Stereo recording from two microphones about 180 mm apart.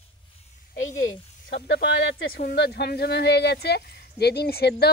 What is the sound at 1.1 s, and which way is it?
Speech, 80° left.